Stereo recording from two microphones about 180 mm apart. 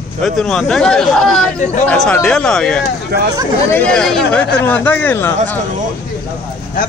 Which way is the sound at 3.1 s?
65° right (ahead or behind).